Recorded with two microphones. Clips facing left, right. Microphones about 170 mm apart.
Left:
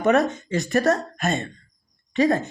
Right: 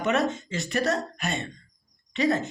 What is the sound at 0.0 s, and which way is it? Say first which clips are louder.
Speech: left 6 dB; 45° left (ahead or behind).